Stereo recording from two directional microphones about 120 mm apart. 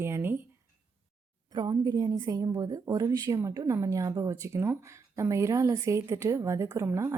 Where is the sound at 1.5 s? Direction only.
35° right (ahead or behind).